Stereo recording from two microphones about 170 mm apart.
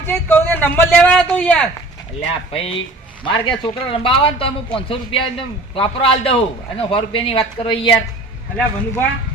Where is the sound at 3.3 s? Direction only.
30° left (ahead or behind).